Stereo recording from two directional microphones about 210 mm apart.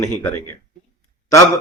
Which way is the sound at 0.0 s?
15° left (ahead or behind).